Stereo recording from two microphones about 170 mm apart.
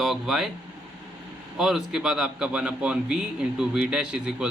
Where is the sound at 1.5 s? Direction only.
Centre (ahead or behind).